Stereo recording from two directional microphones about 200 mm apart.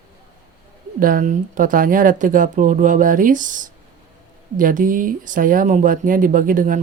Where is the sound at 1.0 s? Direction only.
45° right (ahead or behind).